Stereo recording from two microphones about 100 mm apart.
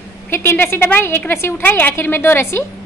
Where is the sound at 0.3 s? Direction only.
20° left (ahead or behind).